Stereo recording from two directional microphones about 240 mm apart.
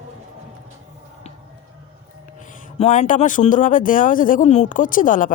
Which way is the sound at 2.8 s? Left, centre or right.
Left.